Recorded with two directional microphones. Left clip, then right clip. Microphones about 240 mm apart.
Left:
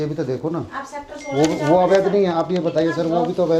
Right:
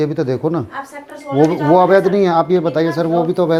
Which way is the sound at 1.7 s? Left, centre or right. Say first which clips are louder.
Right 4 dB; right.